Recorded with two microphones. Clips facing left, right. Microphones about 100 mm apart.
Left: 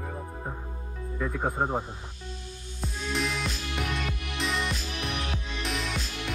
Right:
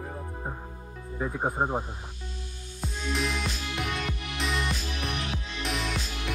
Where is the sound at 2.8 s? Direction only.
Centre (ahead or behind).